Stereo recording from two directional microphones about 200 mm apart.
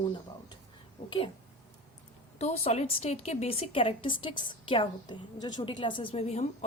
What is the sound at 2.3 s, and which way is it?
A woman's voice, 30° left (ahead or behind).